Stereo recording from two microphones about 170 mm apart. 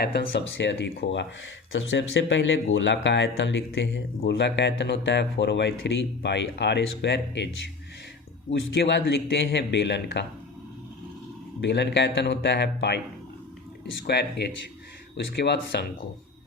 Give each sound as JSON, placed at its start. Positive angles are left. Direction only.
{"t": 0.0, "sound": "speech", "side_deg": 90}
{"t": 11.6, "sound": "speech", "side_deg": 90}
{"t": 14.1, "sound": "speech", "side_deg": 80}